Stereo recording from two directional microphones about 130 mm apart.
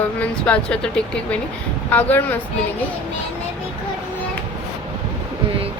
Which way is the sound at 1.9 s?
15° left (ahead or behind).